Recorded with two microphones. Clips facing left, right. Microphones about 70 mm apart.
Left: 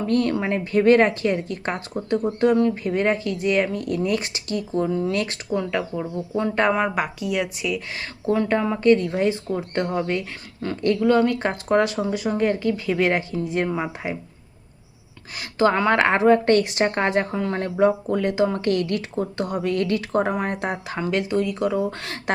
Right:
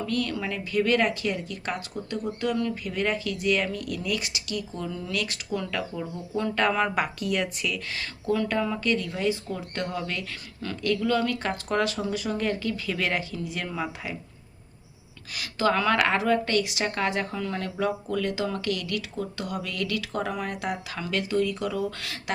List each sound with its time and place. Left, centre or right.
0.0 s a woman's voice: left
5.5 s speech: left
6.7 s speech: centre
8.3 s speech: left
15.4 s a woman's voice: left